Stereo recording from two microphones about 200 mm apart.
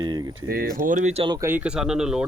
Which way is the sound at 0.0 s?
20° right (ahead or behind).